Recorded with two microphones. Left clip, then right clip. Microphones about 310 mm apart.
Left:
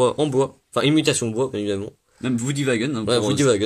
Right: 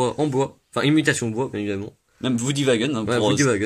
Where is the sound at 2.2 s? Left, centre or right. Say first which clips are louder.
Right 2 dB; right.